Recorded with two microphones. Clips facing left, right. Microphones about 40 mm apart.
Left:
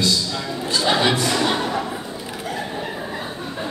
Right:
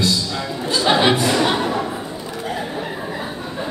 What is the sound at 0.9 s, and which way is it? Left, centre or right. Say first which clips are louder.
Music: right 3 dB; right.